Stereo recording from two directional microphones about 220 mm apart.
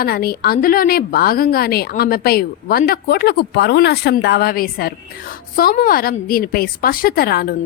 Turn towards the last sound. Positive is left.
turn(degrees=45)  # may be behind; listen again after turning